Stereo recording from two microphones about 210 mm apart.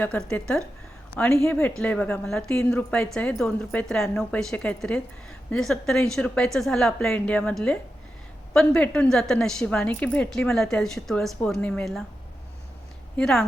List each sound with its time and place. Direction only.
0.0 s a woman's voice: 5° left (ahead or behind)
13.1 s a woman's voice: 5° left (ahead or behind)